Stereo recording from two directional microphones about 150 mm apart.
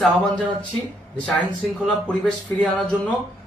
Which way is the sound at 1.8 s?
5° left (ahead or behind).